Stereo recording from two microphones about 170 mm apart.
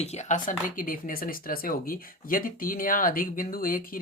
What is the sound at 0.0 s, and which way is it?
Speech, 40° left (ahead or behind).